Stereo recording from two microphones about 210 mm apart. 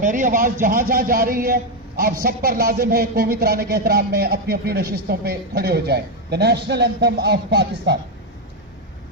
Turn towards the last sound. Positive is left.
turn(degrees=-50)  # may be behind; listen again after turning